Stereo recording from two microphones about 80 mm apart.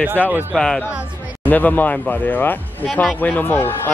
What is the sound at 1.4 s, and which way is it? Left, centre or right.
Speech, left.